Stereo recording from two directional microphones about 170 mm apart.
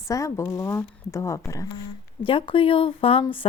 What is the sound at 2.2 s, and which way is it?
Speech, 30° left (ahead or behind).